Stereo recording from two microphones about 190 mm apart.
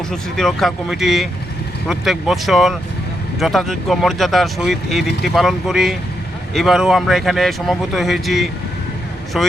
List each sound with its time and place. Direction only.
0.1 s speech: centre (ahead or behind)